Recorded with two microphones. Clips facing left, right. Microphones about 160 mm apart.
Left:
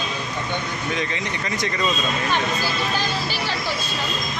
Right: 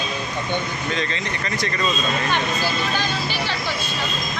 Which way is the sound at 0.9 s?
15° left (ahead or behind).